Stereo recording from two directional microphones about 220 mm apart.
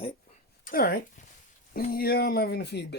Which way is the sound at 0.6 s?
40° left (ahead or behind).